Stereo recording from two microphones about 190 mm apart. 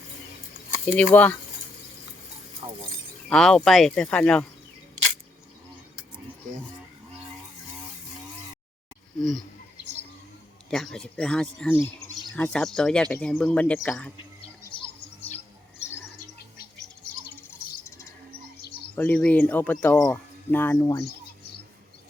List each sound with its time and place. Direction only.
0.9 s speech: 5° left (ahead or behind)
3.2 s speech: 5° left (ahead or behind)
10.7 s speech: centre (ahead or behind)
14.6 s bird: 25° left (ahead or behind)
17.8 s bird: 15° left (ahead or behind)
18.6 s bird: 60° left (ahead or behind)
18.9 s speech: 10° left (ahead or behind)